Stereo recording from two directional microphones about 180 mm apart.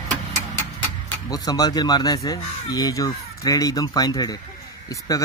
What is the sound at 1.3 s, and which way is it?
Speech, 20° left (ahead or behind).